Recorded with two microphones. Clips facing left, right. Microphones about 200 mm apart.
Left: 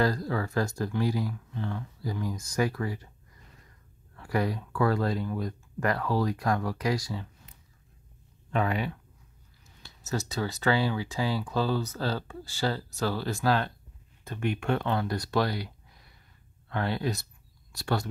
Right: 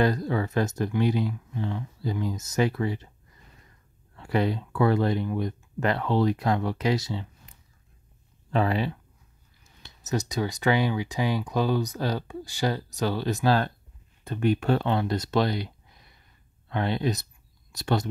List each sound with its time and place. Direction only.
0.0 s speech: 20° right (ahead or behind)
4.2 s speech: 25° right (ahead or behind)
8.5 s speech: 30° right (ahead or behind)
9.8 s speech: 20° right (ahead or behind)
14.2 s speech: 35° right (ahead or behind)